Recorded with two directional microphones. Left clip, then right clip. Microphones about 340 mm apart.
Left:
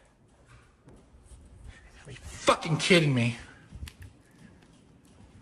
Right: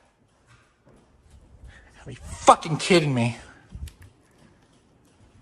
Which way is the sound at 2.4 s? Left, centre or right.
Centre.